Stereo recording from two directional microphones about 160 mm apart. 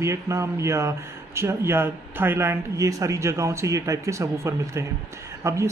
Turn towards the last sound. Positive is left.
turn(degrees=-20)  # may be behind; listen again after turning